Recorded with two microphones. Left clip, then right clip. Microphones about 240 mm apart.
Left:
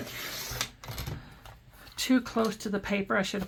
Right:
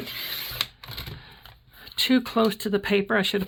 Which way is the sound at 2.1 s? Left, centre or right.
Right.